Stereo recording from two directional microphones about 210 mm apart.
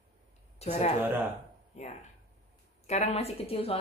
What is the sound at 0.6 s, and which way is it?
A woman's voice, 30° left (ahead or behind).